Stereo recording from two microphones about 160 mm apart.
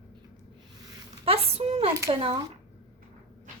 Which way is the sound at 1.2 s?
40° right (ahead or behind).